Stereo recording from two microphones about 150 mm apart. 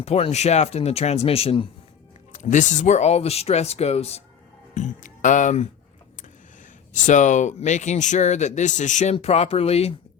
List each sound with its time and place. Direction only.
0.0 s speech: 45° left (ahead or behind)
2.3 s speech: 55° left (ahead or behind)
4.7 s speech: 55° left (ahead or behind)
6.9 s speech: 55° left (ahead or behind)